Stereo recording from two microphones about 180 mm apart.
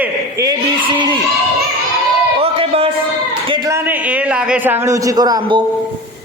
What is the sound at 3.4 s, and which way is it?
A man's voice, 25° right (ahead or behind).